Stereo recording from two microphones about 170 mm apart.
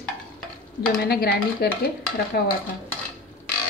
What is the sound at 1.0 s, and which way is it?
Stir, 65° left (ahead or behind).